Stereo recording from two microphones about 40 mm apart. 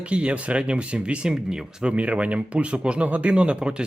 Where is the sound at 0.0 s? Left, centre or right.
Right.